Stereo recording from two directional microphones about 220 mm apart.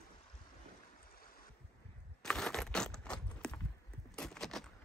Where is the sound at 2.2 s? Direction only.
5° left (ahead or behind).